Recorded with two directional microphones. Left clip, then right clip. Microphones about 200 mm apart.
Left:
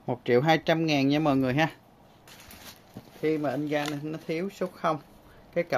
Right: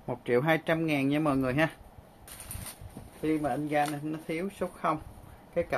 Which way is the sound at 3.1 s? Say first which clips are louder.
Left 2 dB; 60° left (ahead or behind).